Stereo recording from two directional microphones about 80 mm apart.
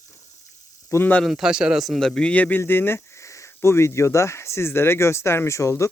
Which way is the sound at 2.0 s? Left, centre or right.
Centre.